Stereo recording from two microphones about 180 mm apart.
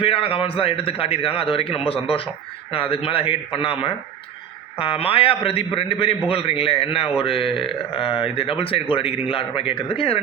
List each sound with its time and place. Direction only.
0.0 s a man's voice: 30° left (ahead or behind)